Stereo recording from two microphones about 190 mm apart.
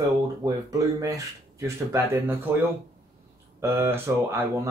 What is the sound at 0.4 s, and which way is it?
Speech, 20° right (ahead or behind).